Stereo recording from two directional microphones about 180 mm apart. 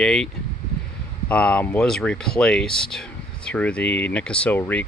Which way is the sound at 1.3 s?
5° left (ahead or behind).